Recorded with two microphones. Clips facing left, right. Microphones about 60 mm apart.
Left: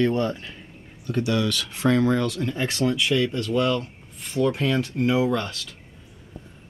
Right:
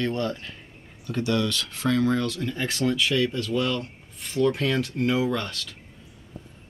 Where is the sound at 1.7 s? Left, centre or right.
Centre.